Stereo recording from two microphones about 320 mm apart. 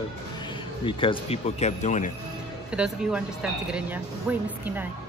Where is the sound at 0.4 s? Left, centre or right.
Centre.